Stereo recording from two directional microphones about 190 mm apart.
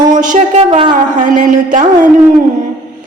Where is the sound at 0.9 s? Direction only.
45° right (ahead or behind).